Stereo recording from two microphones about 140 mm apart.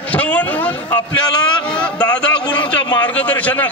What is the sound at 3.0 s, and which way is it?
Speech, 10° left (ahead or behind).